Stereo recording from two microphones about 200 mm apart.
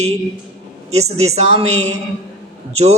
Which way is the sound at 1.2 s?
35° right (ahead or behind).